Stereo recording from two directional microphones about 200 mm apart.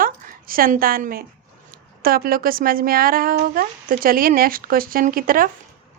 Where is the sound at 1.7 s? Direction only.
45° right (ahead or behind).